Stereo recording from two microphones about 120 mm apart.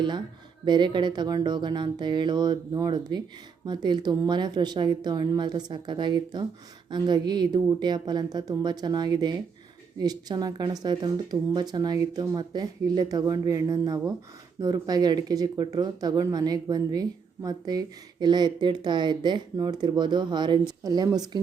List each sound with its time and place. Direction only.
0.6 s speech: 40° right (ahead or behind)